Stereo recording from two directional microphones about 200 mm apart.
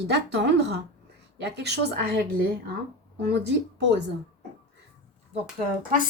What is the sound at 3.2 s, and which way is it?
Speech, 55° right (ahead or behind).